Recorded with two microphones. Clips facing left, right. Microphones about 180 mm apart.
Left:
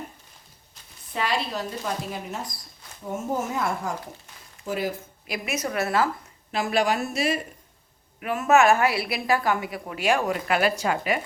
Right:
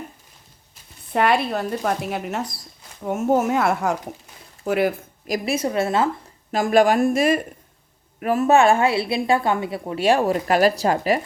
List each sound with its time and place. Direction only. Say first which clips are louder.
1.1 s speech: right 8 dB; 60° right (ahead or behind)
5.2 s a woman's voice: right 8 dB; 40° right (ahead or behind)
5.5 s a woman's voice: right 2 dB; 25° right (ahead or behind)
6.5 s a woman's voice: right 7 dB; 45° right (ahead or behind)
8.2 s a woman's voice: right 3 dB; 35° right (ahead or behind)